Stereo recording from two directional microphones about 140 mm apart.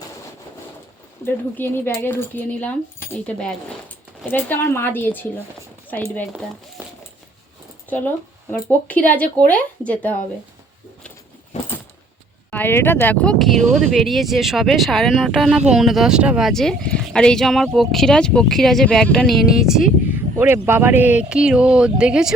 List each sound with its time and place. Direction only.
1.2 s speech: 15° left (ahead or behind)
7.9 s speech: 15° left (ahead or behind)
11.5 s a sound: 55° left (ahead or behind)
12.5 s speech: 15° left (ahead or behind); by 16.5 s 5° right (ahead or behind)
16.5 s speech: 5° left (ahead or behind)
20.1 s speech: 15° right (ahead or behind)